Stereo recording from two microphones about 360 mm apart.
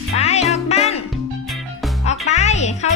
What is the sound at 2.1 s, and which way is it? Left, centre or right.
Music, centre.